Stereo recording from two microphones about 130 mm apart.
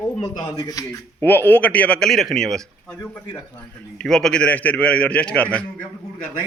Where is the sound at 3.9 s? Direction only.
5° left (ahead or behind).